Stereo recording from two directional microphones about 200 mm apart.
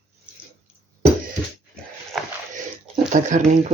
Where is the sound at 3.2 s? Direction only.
40° right (ahead or behind).